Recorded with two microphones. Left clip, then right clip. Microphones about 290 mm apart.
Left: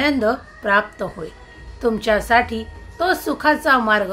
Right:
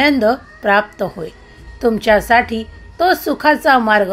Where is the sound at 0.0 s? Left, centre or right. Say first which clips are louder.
Right 5 dB; centre.